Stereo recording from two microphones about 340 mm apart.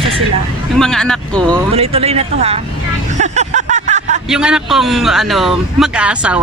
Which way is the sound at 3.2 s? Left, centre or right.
Right.